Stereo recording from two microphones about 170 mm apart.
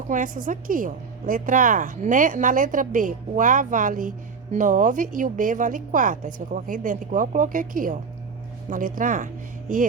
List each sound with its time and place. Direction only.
0.1 s a woman's voice: 50° right (ahead or behind)